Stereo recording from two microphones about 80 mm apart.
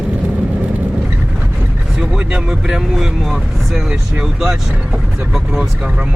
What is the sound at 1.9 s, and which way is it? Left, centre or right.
Speech, centre.